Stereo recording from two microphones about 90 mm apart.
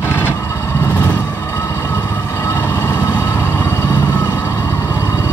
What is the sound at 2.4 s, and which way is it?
Vehicle, 25° left (ahead or behind).